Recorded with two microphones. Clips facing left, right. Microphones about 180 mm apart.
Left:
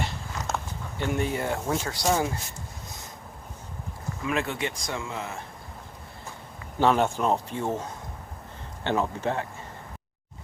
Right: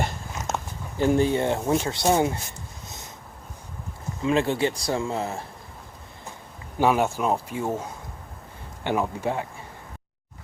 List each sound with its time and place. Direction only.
0.3 s a sound: 20° right (ahead or behind)
0.9 s speech: 35° right (ahead or behind)
4.2 s speech: 30° right (ahead or behind)
6.7 s speech: 10° right (ahead or behind)